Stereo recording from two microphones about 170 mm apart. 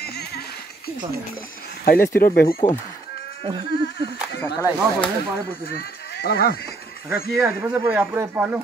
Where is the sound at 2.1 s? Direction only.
60° left (ahead or behind).